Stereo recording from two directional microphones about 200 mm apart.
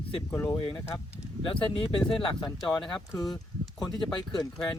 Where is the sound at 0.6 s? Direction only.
25° left (ahead or behind).